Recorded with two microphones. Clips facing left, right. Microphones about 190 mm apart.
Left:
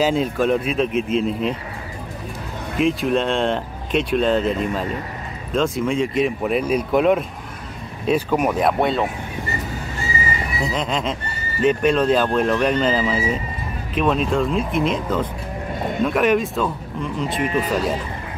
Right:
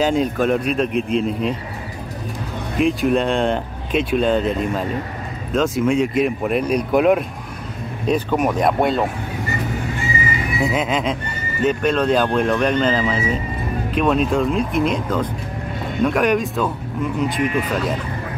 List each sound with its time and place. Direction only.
0.0 s speech: centre (ahead or behind)
2.8 s speech: centre (ahead or behind)
10.6 s speech: 5° right (ahead or behind)
17.3 s speech: 30° left (ahead or behind)